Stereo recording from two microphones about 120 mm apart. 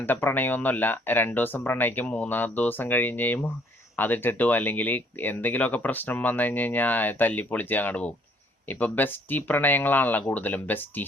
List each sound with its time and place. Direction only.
0.0 s speech: 20° left (ahead or behind)